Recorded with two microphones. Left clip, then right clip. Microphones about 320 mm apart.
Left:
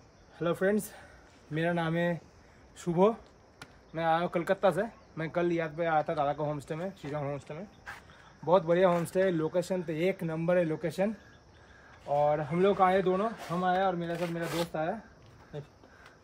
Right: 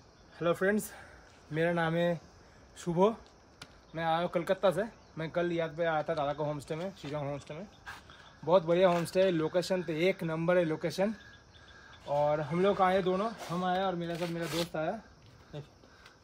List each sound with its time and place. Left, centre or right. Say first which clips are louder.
0.4 s speech: even; centre